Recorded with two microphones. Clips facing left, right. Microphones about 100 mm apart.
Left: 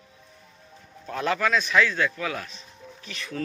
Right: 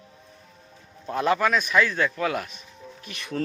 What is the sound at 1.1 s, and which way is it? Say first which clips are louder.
Speech: right 3 dB; 25° right (ahead or behind).